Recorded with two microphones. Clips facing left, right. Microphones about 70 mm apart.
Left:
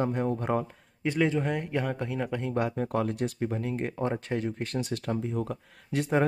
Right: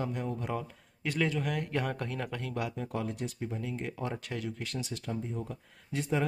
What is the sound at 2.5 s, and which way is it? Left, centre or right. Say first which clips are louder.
Speech: left 8 dB; left.